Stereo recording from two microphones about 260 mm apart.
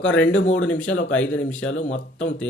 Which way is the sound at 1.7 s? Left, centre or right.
Left.